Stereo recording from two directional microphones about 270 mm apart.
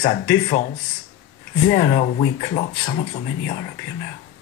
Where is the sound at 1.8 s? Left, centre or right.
Left.